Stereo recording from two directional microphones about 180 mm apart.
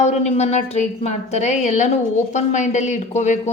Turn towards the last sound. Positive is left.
turn(degrees=40)  # may be behind; listen again after turning